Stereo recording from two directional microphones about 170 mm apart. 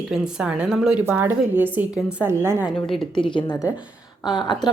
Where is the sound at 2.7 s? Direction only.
Centre (ahead or behind).